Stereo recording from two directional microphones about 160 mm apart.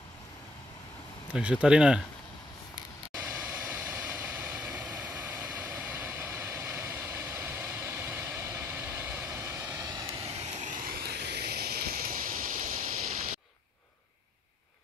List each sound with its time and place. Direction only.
1.3 s speech: 5° right (ahead or behind)
3.3 s vehicle: 10° right (ahead or behind)
10.2 s vehicle: 50° right (ahead or behind)
11.0 s a sound: 90° right; by 13.3 s 60° right (ahead or behind)